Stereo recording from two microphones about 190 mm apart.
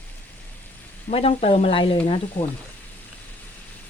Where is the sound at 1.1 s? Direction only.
30° left (ahead or behind).